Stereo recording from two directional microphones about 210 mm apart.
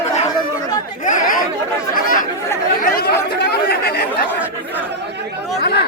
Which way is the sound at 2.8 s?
50° left (ahead or behind).